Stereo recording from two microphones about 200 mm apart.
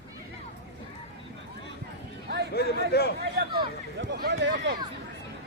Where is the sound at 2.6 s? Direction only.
55° left (ahead or behind).